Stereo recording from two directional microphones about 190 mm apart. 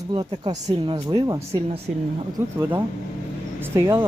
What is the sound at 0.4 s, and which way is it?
Speech, 20° right (ahead or behind).